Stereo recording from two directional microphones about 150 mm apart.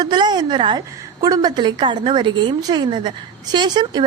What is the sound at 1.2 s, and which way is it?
A woman's voice, 25° right (ahead or behind).